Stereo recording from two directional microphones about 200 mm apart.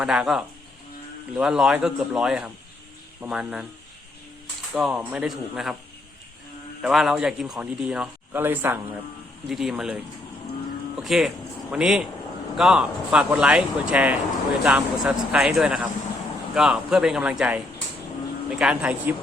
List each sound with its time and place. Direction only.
0.0 s a man's voice: centre (ahead or behind)
4.7 s a man's voice: 5° right (ahead or behind)
6.8 s a man's voice: 5° right (ahead or behind)
11.0 s a man's voice: centre (ahead or behind)
18.6 s a man's voice: 5° right (ahead or behind)